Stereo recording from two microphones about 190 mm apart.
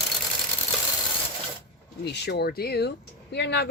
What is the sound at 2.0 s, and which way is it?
Speech, 60° left (ahead or behind).